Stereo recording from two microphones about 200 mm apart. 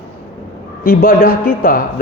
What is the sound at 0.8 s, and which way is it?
A man's voice, 50° left (ahead or behind).